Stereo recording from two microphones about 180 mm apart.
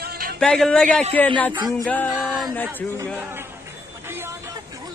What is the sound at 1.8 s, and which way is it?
Male singing, 10° left (ahead or behind).